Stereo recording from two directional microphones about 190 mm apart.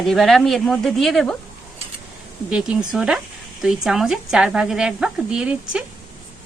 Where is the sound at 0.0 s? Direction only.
Centre (ahead or behind).